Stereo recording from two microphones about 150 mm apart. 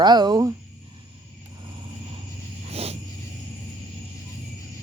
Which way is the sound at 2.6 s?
45° right (ahead or behind).